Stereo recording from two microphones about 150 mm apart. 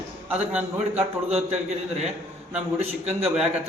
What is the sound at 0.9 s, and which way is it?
Speech, 45° right (ahead or behind).